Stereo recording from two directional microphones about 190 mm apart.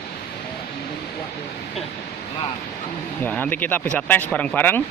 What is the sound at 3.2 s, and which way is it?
Speech, 10° left (ahead or behind).